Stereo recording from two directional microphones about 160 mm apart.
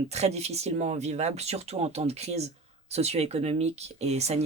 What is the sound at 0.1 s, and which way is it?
Speech, 45° right (ahead or behind).